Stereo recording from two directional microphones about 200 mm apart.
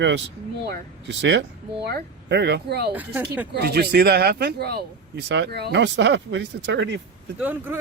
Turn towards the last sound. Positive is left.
turn(degrees=-10)  # may be behind; listen again after turning